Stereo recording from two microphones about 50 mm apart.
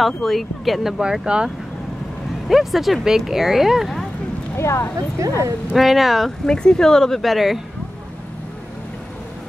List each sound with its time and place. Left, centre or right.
0.0 s speech: centre
1.0 s speech: centre
2.4 s speech: centre
4.6 s speech: left
5.8 s speech: centre
6.4 s speech: centre